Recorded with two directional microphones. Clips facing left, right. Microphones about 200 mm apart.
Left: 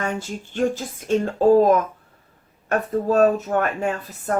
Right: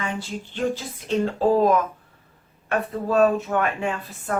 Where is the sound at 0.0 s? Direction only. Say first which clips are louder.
Left 3 dB; 45° left (ahead or behind).